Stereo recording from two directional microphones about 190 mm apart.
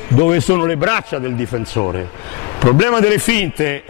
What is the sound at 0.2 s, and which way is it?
A man's voice, 15° left (ahead or behind).